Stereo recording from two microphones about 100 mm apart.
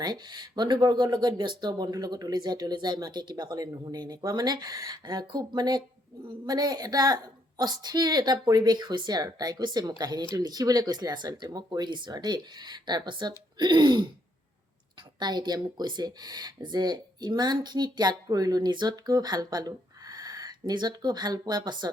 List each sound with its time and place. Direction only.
0.0 s speech: 45° right (ahead or behind)
15.2 s speech: 45° right (ahead or behind)